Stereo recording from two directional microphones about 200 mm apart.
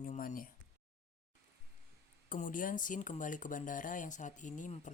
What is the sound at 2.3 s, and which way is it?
Speech, 40° left (ahead or behind).